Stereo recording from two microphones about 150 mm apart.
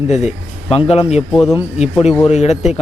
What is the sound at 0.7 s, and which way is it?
A man's voice, 40° left (ahead or behind).